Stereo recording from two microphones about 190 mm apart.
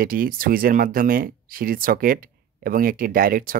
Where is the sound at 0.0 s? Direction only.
50° right (ahead or behind).